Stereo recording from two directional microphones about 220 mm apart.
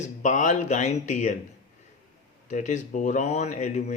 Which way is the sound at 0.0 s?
35° left (ahead or behind).